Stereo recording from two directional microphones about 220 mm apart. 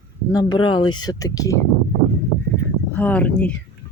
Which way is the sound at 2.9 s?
10° left (ahead or behind).